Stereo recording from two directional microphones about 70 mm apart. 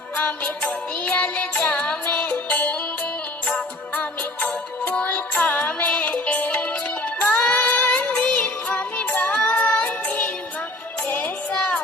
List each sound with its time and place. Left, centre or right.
0.2 s music: left